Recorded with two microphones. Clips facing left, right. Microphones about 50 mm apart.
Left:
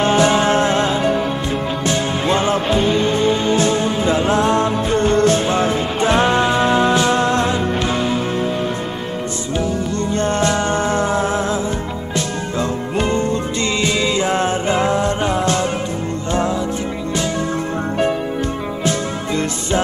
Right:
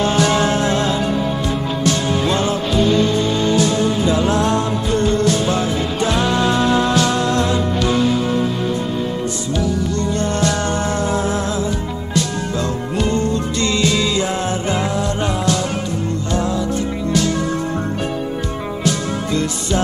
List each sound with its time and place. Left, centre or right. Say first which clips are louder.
0.0 s music: left 2 dB; left
10.1 s music: left 4 dB; left
18.9 s music: right 1 dB; left